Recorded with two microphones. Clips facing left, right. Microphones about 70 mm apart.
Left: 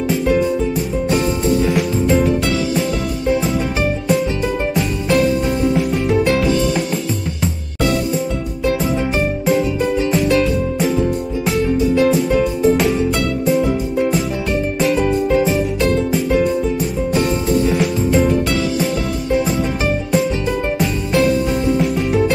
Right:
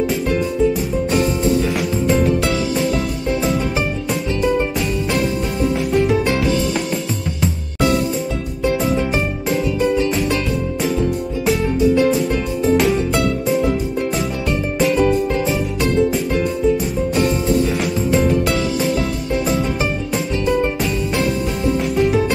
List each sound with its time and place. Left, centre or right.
1.0 s music: centre
5.1 s music: centre
10.0 s music: centre
14.8 s music: centre
15.0 s music: centre
15.8 s music: centre
21.7 s music: centre